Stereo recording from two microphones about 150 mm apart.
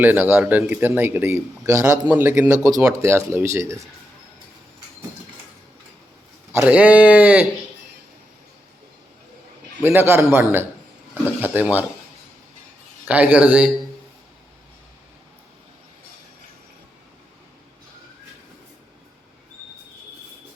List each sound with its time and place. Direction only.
0.0 s speech: 10° right (ahead or behind)
6.5 s speech: 10° right (ahead or behind)
9.8 s speech: 15° right (ahead or behind)
13.1 s speech: 10° right (ahead or behind)